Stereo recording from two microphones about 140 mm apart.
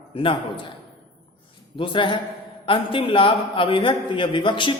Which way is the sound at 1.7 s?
35° left (ahead or behind).